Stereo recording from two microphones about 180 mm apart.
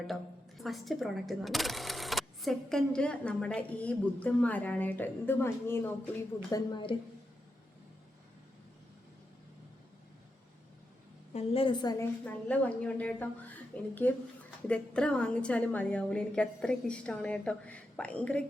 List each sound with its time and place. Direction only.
0.6 s speech: centre (ahead or behind)
6.5 s a woman's voice: 25° left (ahead or behind)
11.3 s a woman's voice: 30° left (ahead or behind)
12.2 s a woman's voice: 10° left (ahead or behind)